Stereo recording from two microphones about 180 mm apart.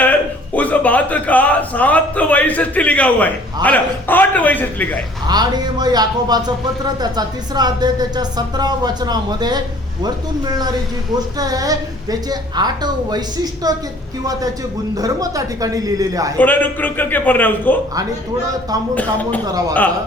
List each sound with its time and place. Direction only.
0.0 s a man's voice: 10° left (ahead or behind)
5.3 s a woman's voice: 20° right (ahead or behind)
14.9 s a woman's voice: 20° right (ahead or behind)
16.4 s a man's voice: 10° left (ahead or behind)
19.5 s a woman's voice: 20° right (ahead or behind)